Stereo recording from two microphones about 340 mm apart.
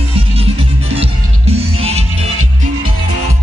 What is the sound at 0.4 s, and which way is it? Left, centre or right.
Music, centre.